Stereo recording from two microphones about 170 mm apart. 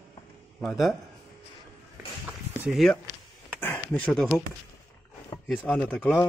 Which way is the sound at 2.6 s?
Centre (ahead or behind).